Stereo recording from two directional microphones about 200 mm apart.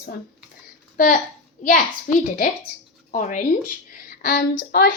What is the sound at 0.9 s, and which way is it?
Speech, 45° left (ahead or behind).